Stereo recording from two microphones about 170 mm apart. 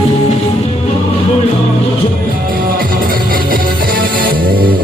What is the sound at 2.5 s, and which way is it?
Music, 60° right (ahead or behind).